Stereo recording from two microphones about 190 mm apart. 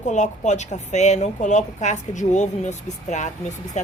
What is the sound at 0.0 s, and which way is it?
Speech, 40° left (ahead or behind).